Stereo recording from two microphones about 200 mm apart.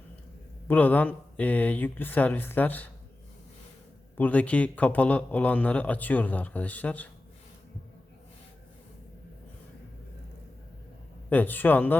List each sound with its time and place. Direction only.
0.7 s speech: 10° left (ahead or behind)
4.2 s speech: 5° left (ahead or behind)
11.3 s speech: 10° left (ahead or behind)